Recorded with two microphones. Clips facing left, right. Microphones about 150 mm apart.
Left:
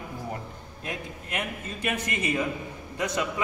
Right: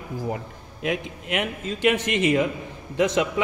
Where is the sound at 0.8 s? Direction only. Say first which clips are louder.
Right 9 dB; 90° right.